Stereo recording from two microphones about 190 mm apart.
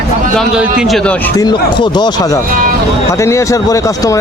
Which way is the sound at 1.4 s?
25° left (ahead or behind).